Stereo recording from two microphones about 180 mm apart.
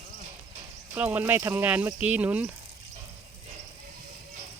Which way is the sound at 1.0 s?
10° right (ahead or behind).